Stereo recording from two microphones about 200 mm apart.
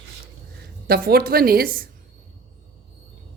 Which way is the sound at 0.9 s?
50° right (ahead or behind).